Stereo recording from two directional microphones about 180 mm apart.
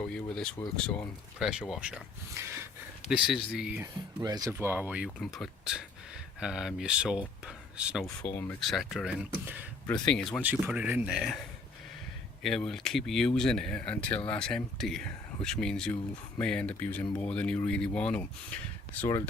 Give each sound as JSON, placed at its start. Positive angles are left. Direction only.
{"t": 0.0, "sound": "speech", "side_deg": 5}
{"t": 1.4, "sound": "speech", "side_deg": -5}
{"t": 3.1, "sound": "speech", "side_deg": -5}
{"t": 4.2, "sound": "speech", "side_deg": -20}
{"t": 8.2, "sound": "speech", "side_deg": 15}
{"t": 8.6, "sound": "speech", "side_deg": 0}
{"t": 10.4, "sound": "speech", "side_deg": -10}
{"t": 12.4, "sound": "speech", "side_deg": 0}